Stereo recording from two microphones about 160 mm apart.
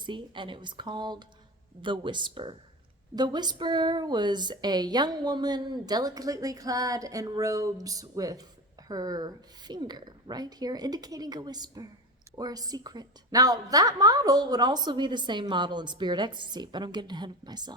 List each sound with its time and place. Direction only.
0.0 s a woman's voice: 30° right (ahead or behind)